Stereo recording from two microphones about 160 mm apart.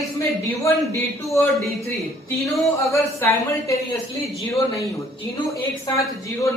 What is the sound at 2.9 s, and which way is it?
Speech, 15° left (ahead or behind).